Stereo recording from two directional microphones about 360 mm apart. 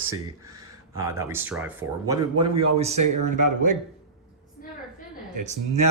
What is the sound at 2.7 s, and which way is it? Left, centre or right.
Speech, centre.